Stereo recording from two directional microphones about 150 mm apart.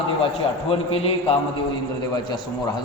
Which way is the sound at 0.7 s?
40° left (ahead or behind).